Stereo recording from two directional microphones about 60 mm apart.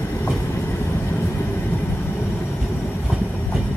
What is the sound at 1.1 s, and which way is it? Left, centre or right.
Vehicle, left.